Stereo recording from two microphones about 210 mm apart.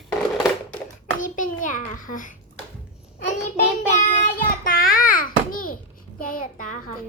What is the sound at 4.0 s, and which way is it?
Child singing, 35° left (ahead or behind).